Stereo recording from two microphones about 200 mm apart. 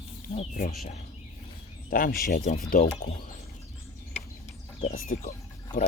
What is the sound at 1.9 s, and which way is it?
Speech, 45° left (ahead or behind).